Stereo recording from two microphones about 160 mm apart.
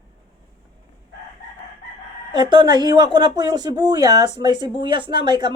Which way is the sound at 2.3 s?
30° right (ahead or behind).